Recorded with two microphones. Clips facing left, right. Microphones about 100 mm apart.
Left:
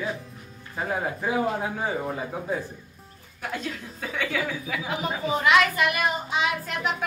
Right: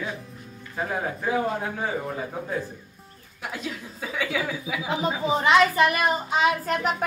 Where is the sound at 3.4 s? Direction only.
5° right (ahead or behind).